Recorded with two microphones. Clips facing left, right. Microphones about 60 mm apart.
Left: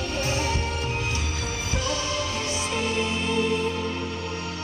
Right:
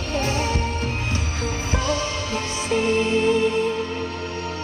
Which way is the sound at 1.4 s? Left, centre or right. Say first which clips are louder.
Right 7 dB; right.